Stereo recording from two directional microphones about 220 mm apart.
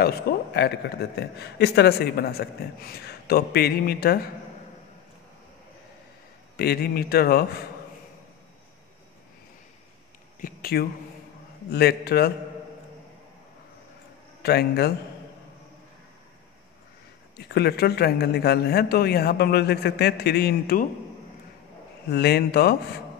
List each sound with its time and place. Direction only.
0.3 s a man's voice: 45° left (ahead or behind)
6.5 s a man's voice: 45° left (ahead or behind)
10.4 s a man's voice: 45° left (ahead or behind)
14.4 s a man's voice: 45° left (ahead or behind)
17.4 s a man's voice: 50° left (ahead or behind)
22.1 s a man's voice: 50° left (ahead or behind)